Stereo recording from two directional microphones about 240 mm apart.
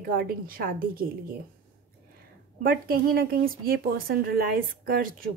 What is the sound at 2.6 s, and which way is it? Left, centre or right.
A woman's voice, right.